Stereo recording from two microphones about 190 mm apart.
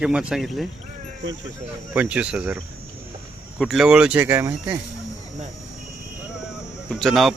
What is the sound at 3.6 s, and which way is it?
Speech, centre (ahead or behind).